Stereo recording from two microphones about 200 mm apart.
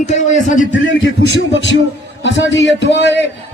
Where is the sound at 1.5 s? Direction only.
65° left (ahead or behind).